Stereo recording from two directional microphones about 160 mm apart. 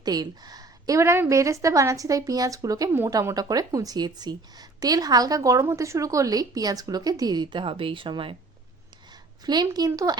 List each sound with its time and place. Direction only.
0.0 s a woman's voice: 25° right (ahead or behind)
9.5 s a woman's voice: 25° right (ahead or behind)